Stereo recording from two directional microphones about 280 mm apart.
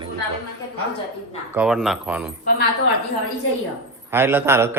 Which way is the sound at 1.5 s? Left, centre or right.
Centre.